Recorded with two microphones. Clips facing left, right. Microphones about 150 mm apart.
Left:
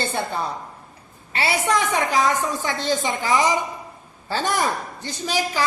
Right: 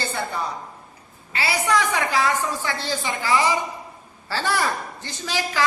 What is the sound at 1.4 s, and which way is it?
A woman's voice, 25° left (ahead or behind).